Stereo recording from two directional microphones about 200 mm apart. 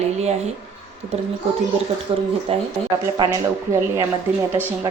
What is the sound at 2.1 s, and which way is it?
Speech, 25° right (ahead or behind).